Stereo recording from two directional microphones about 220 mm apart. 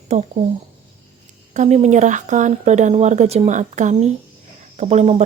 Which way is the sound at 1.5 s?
30° right (ahead or behind).